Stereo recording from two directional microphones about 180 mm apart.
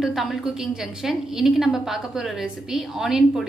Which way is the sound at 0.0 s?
Centre (ahead or behind).